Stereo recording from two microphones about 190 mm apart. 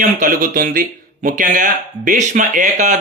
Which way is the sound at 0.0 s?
45° right (ahead or behind).